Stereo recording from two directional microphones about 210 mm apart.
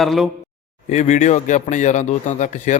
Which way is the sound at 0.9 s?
35° left (ahead or behind).